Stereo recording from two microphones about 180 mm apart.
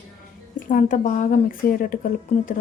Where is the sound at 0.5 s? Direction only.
45° left (ahead or behind).